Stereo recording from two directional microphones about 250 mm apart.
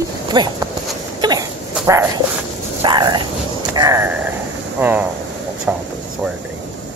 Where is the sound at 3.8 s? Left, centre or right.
Centre.